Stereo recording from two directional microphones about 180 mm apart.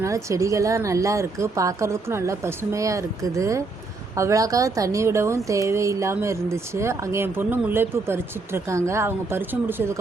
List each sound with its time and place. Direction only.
0.0 s speech: 15° right (ahead or behind)